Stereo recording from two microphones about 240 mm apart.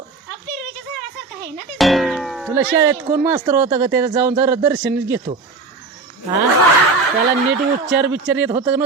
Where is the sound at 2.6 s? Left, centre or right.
Centre.